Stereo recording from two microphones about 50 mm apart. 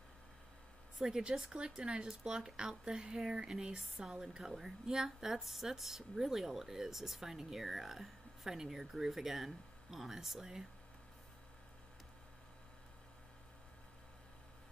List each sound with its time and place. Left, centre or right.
0.9 s speech: centre